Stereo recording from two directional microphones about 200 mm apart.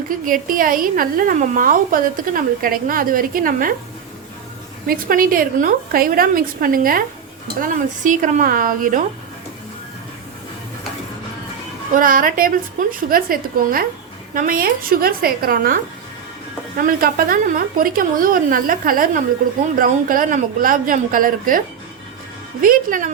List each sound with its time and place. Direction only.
0.3 s a woman's voice: 45° right (ahead or behind)
4.9 s a woman's voice: 45° right (ahead or behind)
11.9 s a woman's voice: 45° right (ahead or behind)
22.6 s a woman's voice: 45° right (ahead or behind)